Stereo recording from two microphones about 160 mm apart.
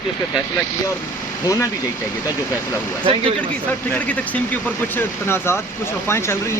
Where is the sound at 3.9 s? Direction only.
10° left (ahead or behind).